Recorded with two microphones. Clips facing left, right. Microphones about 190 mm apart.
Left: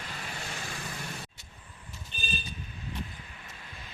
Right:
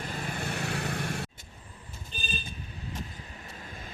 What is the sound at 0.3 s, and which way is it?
Vehicle, 55° right (ahead or behind).